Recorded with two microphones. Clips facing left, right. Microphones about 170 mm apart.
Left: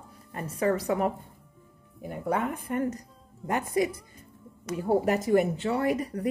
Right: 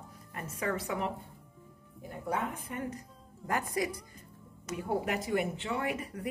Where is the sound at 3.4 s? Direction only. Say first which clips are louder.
Left 6 dB; 20° left (ahead or behind).